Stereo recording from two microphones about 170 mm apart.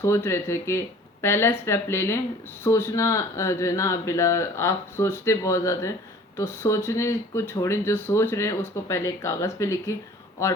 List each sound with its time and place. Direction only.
0.0 s speech: 15° left (ahead or behind)